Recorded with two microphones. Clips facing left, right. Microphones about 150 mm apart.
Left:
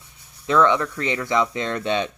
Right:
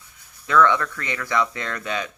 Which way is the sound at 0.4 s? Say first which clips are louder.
Left 1 dB; 20° left (ahead or behind).